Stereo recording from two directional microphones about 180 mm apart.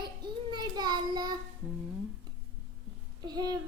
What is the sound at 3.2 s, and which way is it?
Speech, 20° right (ahead or behind).